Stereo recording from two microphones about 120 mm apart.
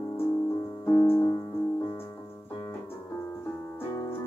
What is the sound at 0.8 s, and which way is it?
Music, 20° left (ahead or behind).